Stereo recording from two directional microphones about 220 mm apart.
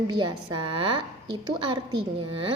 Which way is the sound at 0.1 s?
20° right (ahead or behind).